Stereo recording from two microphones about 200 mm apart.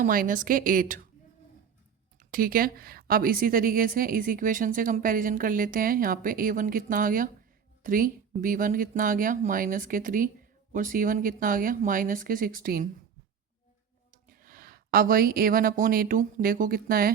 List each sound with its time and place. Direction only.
0.0 s speech: 40° right (ahead or behind)
2.3 s speech: 45° right (ahead or behind)
14.3 s a woman's voice: 45° right (ahead or behind)